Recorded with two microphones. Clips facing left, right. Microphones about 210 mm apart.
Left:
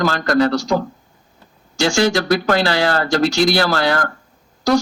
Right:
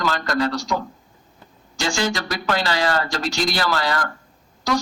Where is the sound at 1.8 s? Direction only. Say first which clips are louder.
Left 7 dB; 70° left (ahead or behind).